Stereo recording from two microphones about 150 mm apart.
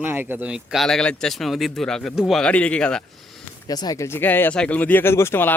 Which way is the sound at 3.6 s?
25° left (ahead or behind).